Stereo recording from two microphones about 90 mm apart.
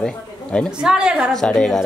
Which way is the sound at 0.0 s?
10° left (ahead or behind).